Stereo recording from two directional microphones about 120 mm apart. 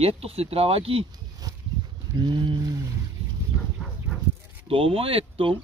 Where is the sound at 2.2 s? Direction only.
40° right (ahead or behind).